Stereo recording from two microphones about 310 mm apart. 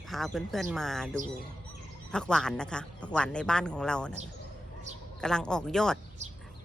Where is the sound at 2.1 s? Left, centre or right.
Centre.